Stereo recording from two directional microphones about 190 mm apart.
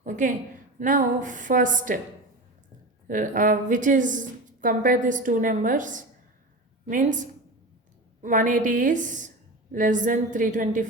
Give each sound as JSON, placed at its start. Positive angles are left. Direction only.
{"t": 0.0, "sound": "a sound", "side_deg": -40}
{"t": 0.8, "sound": "a woman's voice", "side_deg": -45}
{"t": 3.1, "sound": "a woman's voice", "side_deg": -45}